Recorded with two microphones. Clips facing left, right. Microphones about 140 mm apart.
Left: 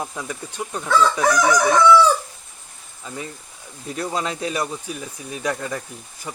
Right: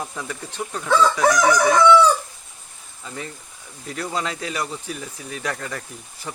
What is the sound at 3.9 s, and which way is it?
A man's voice, 25° left (ahead or behind).